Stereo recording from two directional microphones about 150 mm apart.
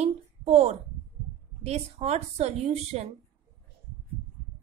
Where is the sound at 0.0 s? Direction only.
45° right (ahead or behind).